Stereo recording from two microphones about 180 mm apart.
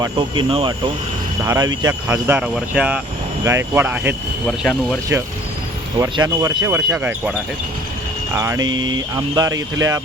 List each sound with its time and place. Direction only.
0.0 s speech: 25° right (ahead or behind); by 4.1 s 10° right (ahead or behind)
4.4 s speech: 5° left (ahead or behind)
6.0 s speech: 20° right (ahead or behind)
6.9 s speech: centre (ahead or behind)
8.3 s speech: 15° right (ahead or behind)
8.7 s speech: 90° right
9.1 s speech: 20° right (ahead or behind)